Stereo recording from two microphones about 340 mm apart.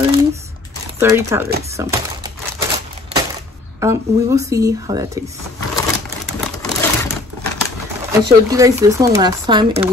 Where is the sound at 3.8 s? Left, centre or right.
Centre.